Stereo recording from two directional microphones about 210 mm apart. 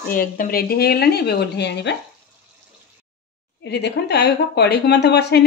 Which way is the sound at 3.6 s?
50° left (ahead or behind).